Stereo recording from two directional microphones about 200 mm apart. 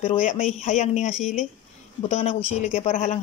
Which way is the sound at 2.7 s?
35° left (ahead or behind).